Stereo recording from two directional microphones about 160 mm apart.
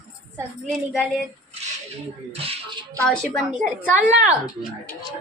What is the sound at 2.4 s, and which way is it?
Speech, 35° right (ahead or behind).